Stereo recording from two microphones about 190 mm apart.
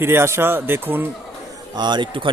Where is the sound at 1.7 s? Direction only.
25° right (ahead or behind).